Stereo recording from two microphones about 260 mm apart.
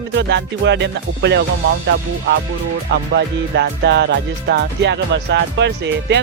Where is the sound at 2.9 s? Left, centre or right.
Right.